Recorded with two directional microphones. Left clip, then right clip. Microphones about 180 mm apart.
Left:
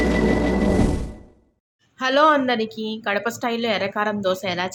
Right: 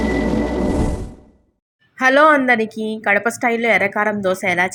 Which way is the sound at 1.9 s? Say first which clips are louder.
Right 5 dB; 20° right (ahead or behind).